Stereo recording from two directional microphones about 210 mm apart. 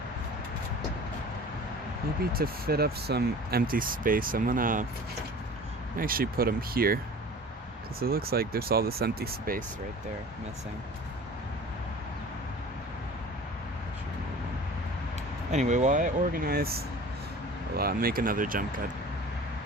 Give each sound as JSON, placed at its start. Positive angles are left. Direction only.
{"t": 2.3, "sound": "speech", "side_deg": -45}
{"t": 6.0, "sound": "speech", "side_deg": -45}
{"t": 15.5, "sound": "speech", "side_deg": -35}